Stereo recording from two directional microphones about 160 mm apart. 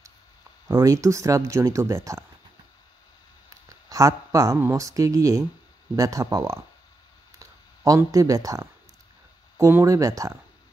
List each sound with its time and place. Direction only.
0.7 s speech: 20° right (ahead or behind)
3.6 s speech: 20° right (ahead or behind)
7.3 s a sound: 20° right (ahead or behind)
9.6 s speech: 15° right (ahead or behind)